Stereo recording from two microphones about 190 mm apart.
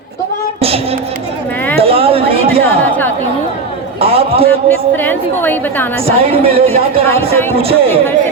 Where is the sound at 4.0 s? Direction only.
30° right (ahead or behind).